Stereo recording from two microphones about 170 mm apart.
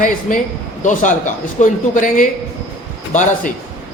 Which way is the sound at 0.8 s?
45° left (ahead or behind).